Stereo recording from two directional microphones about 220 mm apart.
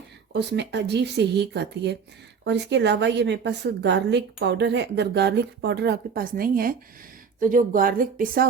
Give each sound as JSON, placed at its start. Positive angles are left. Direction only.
{"t": 0.3, "sound": "a woman's voice", "side_deg": -50}